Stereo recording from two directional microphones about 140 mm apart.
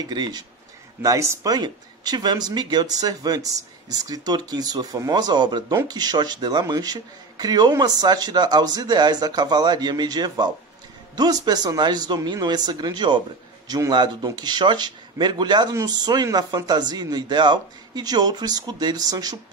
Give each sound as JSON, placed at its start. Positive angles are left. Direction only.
{"t": 0.0, "sound": "a man's voice", "side_deg": -30}